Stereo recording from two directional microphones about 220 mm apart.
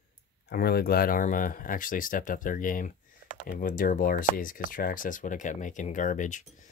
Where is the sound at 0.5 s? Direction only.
45° left (ahead or behind).